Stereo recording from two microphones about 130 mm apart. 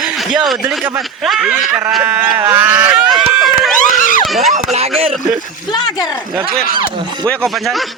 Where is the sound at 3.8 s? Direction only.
90° left.